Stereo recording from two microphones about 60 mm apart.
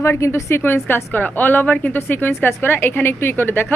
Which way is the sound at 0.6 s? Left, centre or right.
Left.